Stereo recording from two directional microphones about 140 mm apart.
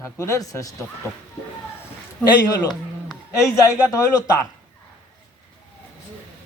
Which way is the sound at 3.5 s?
20° left (ahead or behind).